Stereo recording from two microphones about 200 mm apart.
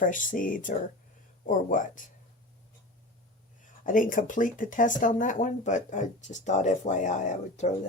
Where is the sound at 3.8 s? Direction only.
40° left (ahead or behind).